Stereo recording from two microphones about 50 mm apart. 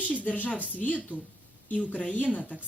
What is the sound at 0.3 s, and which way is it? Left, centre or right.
A woman's voice, left.